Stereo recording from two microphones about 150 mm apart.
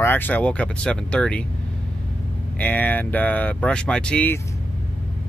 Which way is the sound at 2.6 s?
10° left (ahead or behind).